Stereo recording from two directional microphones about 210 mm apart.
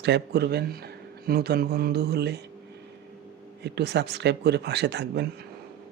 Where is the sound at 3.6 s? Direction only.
50° right (ahead or behind).